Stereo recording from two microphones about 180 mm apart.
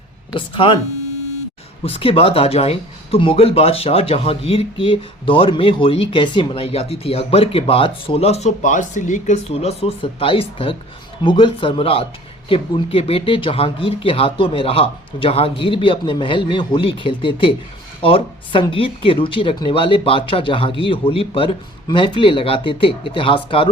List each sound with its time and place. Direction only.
0.3 s speech: 30° left (ahead or behind)
1.8 s speech: 30° left (ahead or behind)